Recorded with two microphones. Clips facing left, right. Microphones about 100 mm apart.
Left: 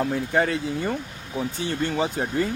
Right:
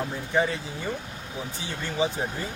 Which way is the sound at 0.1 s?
60° left (ahead or behind).